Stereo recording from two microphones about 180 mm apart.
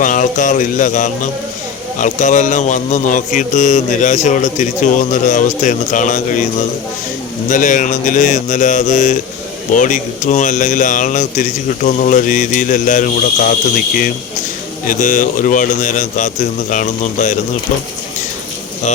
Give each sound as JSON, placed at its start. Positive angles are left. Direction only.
{"t": 0.0, "sound": "a man's voice", "side_deg": 45}